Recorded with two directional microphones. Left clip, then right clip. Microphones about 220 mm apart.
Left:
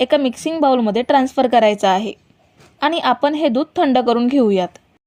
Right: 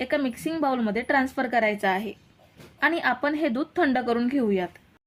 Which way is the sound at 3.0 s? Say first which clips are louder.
Left 9 dB; 30° left (ahead or behind).